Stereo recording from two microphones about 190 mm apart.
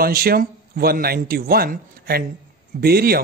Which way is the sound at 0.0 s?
50° right (ahead or behind).